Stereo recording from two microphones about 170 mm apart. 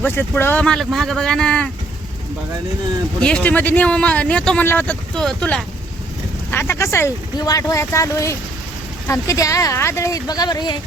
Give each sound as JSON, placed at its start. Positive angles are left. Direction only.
{"t": 0.0, "sound": "speech", "side_deg": 10}
{"t": 3.2, "sound": "speech", "side_deg": 5}